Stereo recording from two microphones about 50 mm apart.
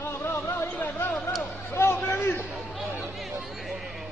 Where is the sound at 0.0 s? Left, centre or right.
Left.